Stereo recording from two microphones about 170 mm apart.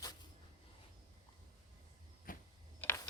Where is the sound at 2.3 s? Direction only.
55° left (ahead or behind).